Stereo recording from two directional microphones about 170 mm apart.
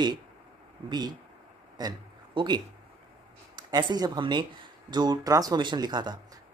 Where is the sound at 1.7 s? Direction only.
25° right (ahead or behind).